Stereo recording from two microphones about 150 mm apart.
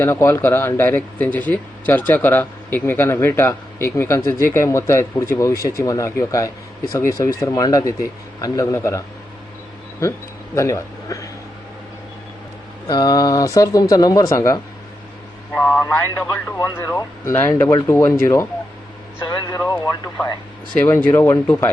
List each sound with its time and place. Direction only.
0.0 s speech: 15° left (ahead or behind)
12.9 s speech: 25° left (ahead or behind)
15.5 s speech: 5° left (ahead or behind)
15.8 s speech: 20° left (ahead or behind)
20.7 s speech: 15° left (ahead or behind)